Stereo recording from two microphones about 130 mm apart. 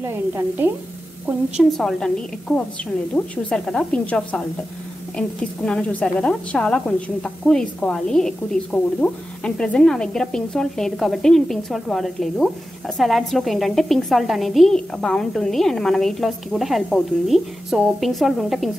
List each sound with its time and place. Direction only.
0.0 s speech: 20° right (ahead or behind)
1.6 s a woman's voice: centre (ahead or behind)